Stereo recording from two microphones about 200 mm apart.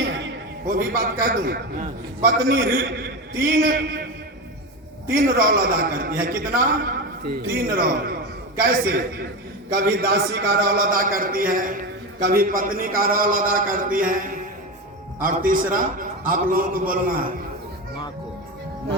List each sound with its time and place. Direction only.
0.7 s a man's voice: 45° right (ahead or behind)
5.0 s a man's voice: 45° right (ahead or behind)